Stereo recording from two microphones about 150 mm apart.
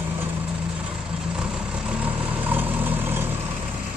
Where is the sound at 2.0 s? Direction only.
10° right (ahead or behind).